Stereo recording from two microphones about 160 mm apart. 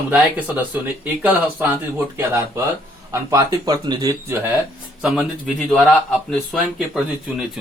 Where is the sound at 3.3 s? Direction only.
25° right (ahead or behind).